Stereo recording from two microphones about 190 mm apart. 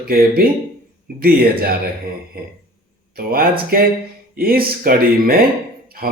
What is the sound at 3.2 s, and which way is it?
Speech, 50° right (ahead or behind).